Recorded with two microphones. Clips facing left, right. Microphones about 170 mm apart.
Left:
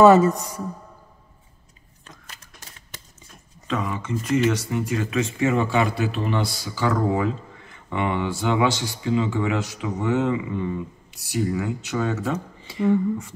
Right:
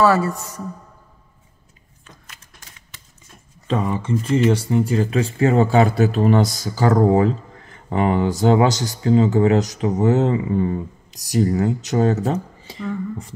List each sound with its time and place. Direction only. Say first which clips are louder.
0.0 s a woman's voice: left 4 dB; 20° left (ahead or behind)
3.6 s speech: right 5 dB; 35° right (ahead or behind)